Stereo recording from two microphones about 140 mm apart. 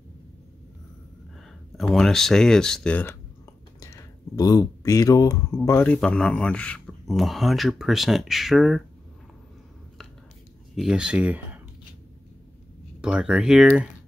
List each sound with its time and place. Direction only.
1.8 s speech: centre (ahead or behind)
3.8 s a sound: 25° left (ahead or behind)
5.9 s speech: 5° left (ahead or behind)
10.8 s speech: 5° right (ahead or behind)
13.0 s speech: 5° right (ahead or behind)